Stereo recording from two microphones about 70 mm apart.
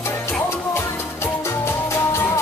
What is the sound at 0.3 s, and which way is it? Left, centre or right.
Music, left.